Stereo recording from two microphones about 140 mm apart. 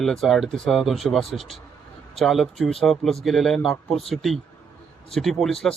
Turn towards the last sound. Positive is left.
turn(degrees=0)  # may be behind; listen again after turning